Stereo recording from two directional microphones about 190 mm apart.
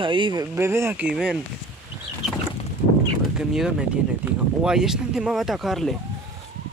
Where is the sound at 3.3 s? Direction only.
5° right (ahead or behind).